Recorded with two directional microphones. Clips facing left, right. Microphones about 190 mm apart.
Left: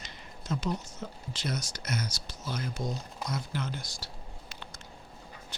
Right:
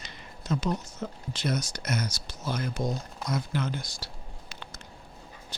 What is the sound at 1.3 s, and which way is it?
Speech, 55° right (ahead or behind).